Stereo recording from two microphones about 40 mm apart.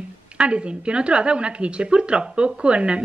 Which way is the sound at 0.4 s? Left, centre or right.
Right.